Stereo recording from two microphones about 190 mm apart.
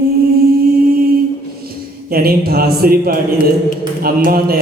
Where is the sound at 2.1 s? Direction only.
50° right (ahead or behind).